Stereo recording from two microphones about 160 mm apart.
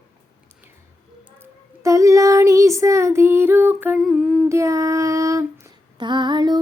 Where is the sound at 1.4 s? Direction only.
20° right (ahead or behind).